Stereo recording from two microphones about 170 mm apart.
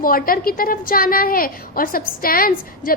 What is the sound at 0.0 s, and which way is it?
A woman's voice, 55° left (ahead or behind).